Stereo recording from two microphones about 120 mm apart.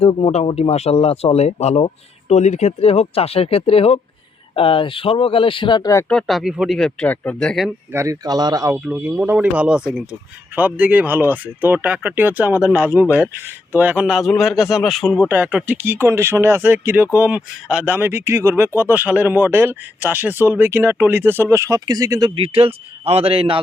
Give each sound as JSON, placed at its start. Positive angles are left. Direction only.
{"t": 0.0, "sound": "speech", "side_deg": 50}
{"t": 2.3, "sound": "speech", "side_deg": 70}
{"t": 6.1, "sound": "a man's voice", "side_deg": 5}
{"t": 7.9, "sound": "speech", "side_deg": -30}
{"t": 8.7, "sound": "a man's voice", "side_deg": -10}
{"t": 15.3, "sound": "speech", "side_deg": -15}
{"t": 22.4, "sound": "a man's voice", "side_deg": -50}